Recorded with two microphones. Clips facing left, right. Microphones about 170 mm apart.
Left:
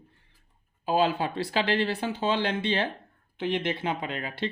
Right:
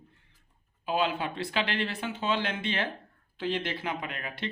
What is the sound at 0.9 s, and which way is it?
Speech, 35° left (ahead or behind).